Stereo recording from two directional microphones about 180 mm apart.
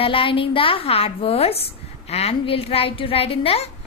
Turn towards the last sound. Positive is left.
turn(degrees=35)  # may be behind; listen again after turning